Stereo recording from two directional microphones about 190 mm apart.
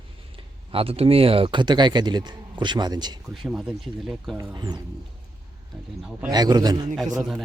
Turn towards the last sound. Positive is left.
turn(degrees=-5)  # may be behind; listen again after turning